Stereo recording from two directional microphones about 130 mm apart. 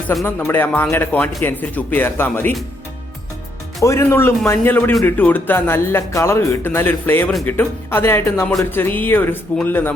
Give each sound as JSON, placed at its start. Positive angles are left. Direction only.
{"t": 0.3, "sound": "a man's voice", "side_deg": 15}
{"t": 3.8, "sound": "a man's voice", "side_deg": 20}